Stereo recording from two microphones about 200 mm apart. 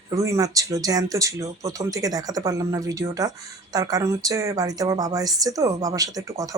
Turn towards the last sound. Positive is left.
turn(degrees=-15)  # may be behind; listen again after turning